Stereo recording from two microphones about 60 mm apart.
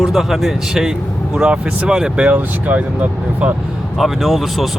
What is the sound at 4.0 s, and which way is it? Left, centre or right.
Speech, centre.